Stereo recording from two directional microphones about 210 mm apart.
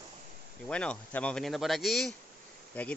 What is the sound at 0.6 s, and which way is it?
Speech, 5° left (ahead or behind).